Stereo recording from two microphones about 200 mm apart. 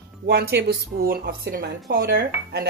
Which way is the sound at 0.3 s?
55° right (ahead or behind).